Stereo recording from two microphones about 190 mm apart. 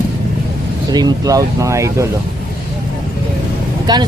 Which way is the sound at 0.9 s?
20° right (ahead or behind).